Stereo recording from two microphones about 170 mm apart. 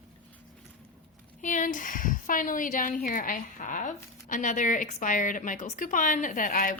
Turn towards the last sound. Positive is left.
turn(degrees=55)  # may be behind; listen again after turning